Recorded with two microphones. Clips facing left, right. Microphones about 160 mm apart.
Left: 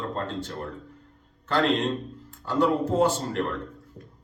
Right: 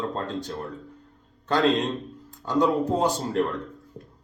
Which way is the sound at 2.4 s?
15° right (ahead or behind).